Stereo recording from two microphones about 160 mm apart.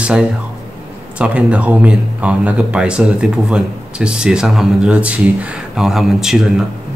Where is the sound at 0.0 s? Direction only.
5° right (ahead or behind).